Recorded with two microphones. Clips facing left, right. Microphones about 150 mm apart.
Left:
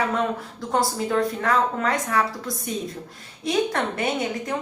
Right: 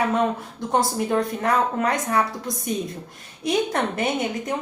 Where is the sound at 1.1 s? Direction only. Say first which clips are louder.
Even; 25° right (ahead or behind).